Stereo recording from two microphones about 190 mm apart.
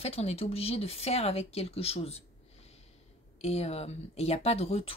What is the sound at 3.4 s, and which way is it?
Speech, 35° left (ahead or behind).